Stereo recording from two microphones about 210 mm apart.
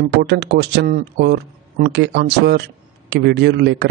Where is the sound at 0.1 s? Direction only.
55° right (ahead or behind).